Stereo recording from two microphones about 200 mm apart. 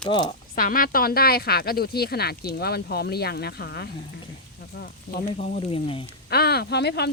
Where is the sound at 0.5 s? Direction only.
45° left (ahead or behind).